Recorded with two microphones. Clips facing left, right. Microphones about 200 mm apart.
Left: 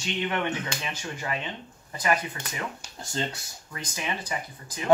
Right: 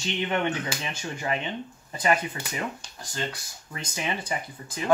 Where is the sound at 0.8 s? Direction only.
25° right (ahead or behind).